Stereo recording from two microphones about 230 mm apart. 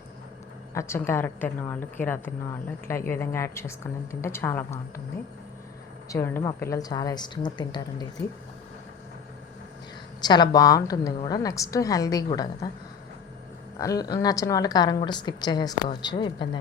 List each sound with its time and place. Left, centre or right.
0.7 s a woman's voice: centre
6.1 s a woman's voice: centre
10.2 s a woman's voice: centre
13.7 s a woman's voice: centre